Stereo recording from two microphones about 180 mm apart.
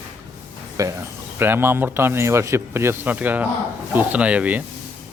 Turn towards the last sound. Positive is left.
turn(degrees=-10)  # may be behind; listen again after turning